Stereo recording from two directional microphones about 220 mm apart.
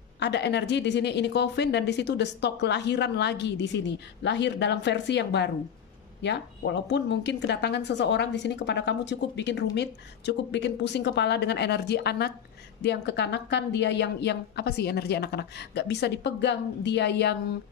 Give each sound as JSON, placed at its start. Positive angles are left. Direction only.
{"t": 0.2, "sound": "speech", "side_deg": 50}